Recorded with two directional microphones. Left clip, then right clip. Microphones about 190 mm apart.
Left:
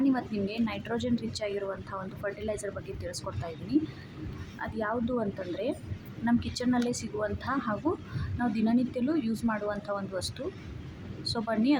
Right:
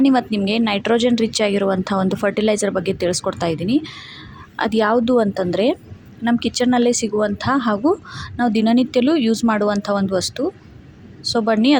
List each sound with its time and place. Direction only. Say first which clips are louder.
0.0 s a woman's voice: right 12 dB; 45° right (ahead or behind)